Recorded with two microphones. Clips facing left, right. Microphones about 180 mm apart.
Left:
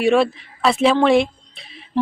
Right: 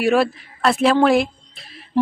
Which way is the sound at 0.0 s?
5° right (ahead or behind).